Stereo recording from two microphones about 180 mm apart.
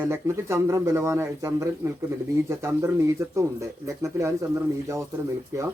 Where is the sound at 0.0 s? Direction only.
15° right (ahead or behind).